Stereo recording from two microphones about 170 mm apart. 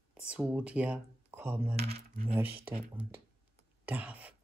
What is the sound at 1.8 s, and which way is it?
Coin, 35° right (ahead or behind).